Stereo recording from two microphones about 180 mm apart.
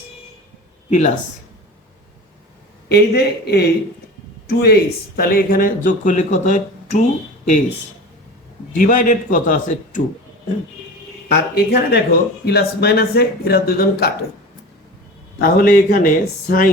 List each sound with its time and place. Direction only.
0.9 s speech: 40° left (ahead or behind)
2.9 s speech: 65° left (ahead or behind); by 7.0 s 40° left (ahead or behind)
8.7 s speech: 50° left (ahead or behind)
11.3 s speech: 60° left (ahead or behind)
15.4 s speech: 55° left (ahead or behind)